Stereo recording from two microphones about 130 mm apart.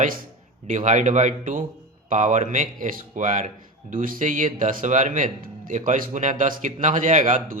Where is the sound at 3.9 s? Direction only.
90° right.